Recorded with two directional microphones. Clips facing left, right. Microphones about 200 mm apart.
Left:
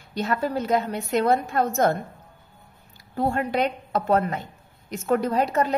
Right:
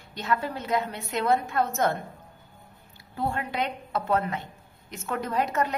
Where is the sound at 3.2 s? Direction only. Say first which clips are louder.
Left 6 dB; 45° left (ahead or behind).